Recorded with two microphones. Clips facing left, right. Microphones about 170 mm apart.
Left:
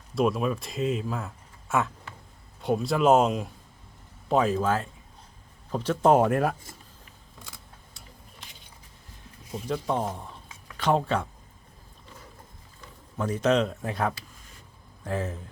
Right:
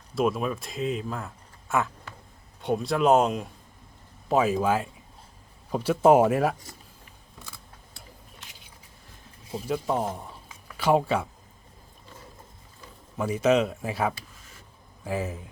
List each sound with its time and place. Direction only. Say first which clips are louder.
0.1 s speech: left 1 dB; centre (ahead or behind)
9.6 s speech: right 1 dB; 5° right (ahead or behind)
13.1 s speech: right 1 dB; 10° right (ahead or behind)